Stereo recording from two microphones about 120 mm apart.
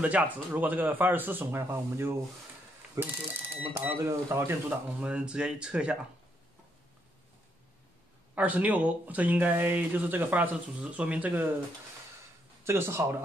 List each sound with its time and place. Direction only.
0.0 s speech: 15° right (ahead or behind)
4.6 s speech: 10° right (ahead or behind)
8.4 s speech: 10° right (ahead or behind)
12.6 s speech: 20° right (ahead or behind)